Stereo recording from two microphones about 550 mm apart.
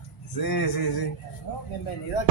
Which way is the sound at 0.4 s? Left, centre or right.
Left.